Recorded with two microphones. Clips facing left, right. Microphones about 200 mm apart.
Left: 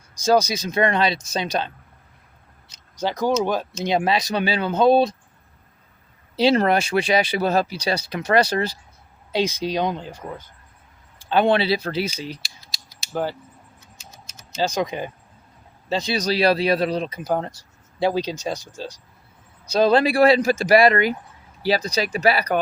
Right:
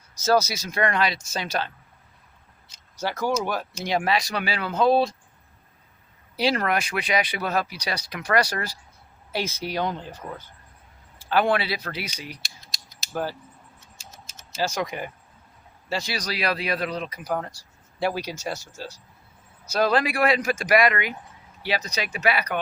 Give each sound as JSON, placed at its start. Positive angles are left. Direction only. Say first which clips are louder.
{"t": 0.2, "sound": "speech", "louder": "left 3 dB", "side_deg": 15}
{"t": 3.0, "sound": "speech", "louder": "left 4 dB", "side_deg": 15}
{"t": 6.3, "sound": "speech", "louder": "left 6 dB", "side_deg": 25}
{"t": 14.5, "sound": "speech", "louder": "left 4 dB", "side_deg": 20}